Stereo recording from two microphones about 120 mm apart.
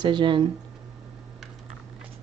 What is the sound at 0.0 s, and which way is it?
Speech, 40° right (ahead or behind).